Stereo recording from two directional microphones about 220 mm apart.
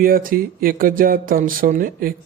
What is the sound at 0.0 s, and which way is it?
Speech, 40° right (ahead or behind).